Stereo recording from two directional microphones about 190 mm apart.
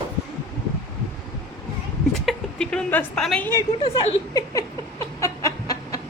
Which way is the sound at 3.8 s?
30° left (ahead or behind).